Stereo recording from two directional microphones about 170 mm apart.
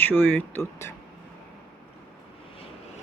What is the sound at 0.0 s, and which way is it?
Speech, 10° left (ahead or behind).